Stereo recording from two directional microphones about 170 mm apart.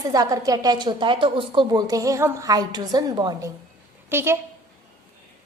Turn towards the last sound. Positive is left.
turn(degrees=-15)  # may be behind; listen again after turning